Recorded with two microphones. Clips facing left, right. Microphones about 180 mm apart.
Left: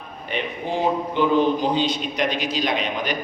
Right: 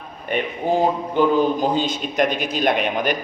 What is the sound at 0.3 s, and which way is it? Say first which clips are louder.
A man's voice: right 5 dB; 45° right (ahead or behind).